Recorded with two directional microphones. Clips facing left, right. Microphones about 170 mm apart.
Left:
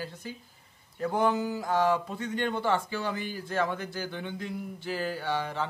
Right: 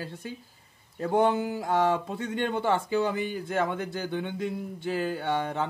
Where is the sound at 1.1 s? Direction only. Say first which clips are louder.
Right 3 dB; 25° right (ahead or behind).